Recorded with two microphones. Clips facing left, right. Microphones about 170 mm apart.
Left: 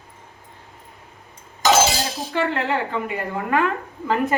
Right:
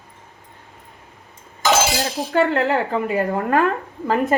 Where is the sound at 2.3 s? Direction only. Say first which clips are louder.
Right 5 dB; 40° right (ahead or behind).